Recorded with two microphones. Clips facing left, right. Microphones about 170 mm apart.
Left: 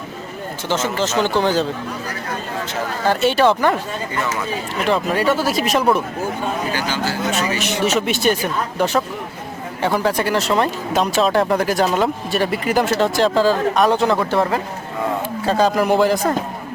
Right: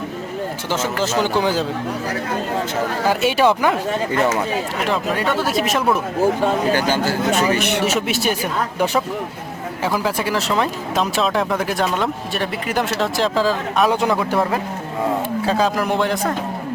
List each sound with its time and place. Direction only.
0.7 s speech: 10° right (ahead or behind)
3.1 s speech: 10° right (ahead or behind)
4.9 s speech: centre (ahead or behind)
6.7 s speech: 50° right (ahead or behind)
7.9 s speech: 5° right (ahead or behind)